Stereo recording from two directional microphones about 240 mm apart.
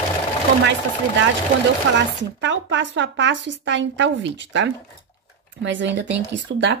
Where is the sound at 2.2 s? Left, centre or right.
Right.